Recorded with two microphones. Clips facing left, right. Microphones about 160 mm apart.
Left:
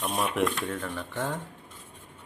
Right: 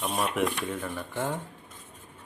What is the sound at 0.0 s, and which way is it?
Speech, centre (ahead or behind).